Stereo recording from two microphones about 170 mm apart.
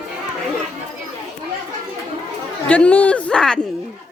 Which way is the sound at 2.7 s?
10° left (ahead or behind).